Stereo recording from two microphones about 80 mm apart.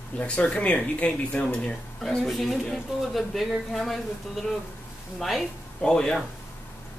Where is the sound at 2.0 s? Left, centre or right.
Centre.